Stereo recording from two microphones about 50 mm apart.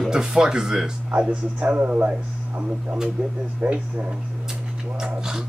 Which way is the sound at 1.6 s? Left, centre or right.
Right.